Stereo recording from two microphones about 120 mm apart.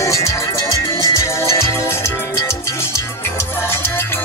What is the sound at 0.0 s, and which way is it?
Music, 25° left (ahead or behind).